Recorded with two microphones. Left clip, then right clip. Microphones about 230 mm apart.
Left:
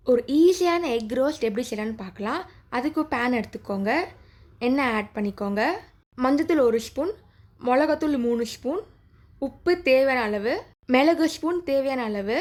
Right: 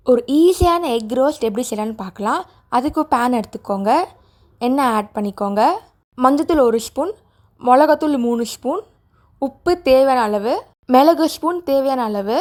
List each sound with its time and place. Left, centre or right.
0.0 s a woman's voice: right